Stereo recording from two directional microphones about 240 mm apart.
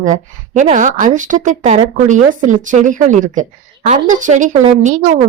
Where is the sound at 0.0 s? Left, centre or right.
Right.